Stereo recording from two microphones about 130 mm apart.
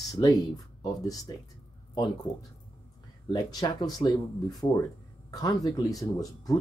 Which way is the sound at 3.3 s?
30° left (ahead or behind).